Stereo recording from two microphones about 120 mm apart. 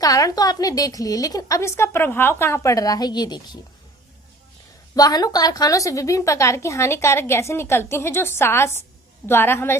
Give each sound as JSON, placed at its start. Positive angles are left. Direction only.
{"t": 0.0, "sound": "a woman's voice", "side_deg": 30}
{"t": 4.9, "sound": "a woman's voice", "side_deg": 30}